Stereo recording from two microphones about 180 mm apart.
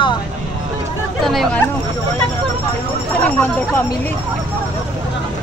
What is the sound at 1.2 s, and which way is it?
Speech, centre (ahead or behind).